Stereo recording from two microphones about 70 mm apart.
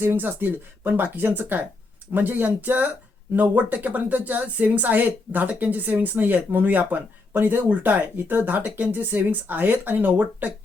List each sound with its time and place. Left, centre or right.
0.0 s speech: right